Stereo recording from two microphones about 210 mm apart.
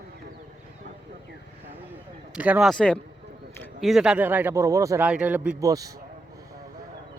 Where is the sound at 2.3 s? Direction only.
5° right (ahead or behind).